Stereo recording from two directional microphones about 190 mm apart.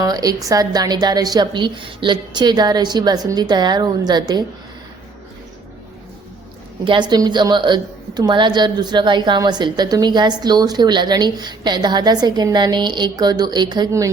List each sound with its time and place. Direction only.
0.0 s a woman's voice: 20° right (ahead or behind)
6.8 s a woman's voice: 25° right (ahead or behind)